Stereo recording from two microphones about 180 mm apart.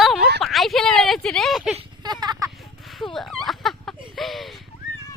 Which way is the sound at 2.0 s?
25° right (ahead or behind).